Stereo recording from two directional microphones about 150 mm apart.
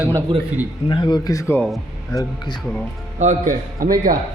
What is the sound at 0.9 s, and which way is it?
Speech, 30° left (ahead or behind).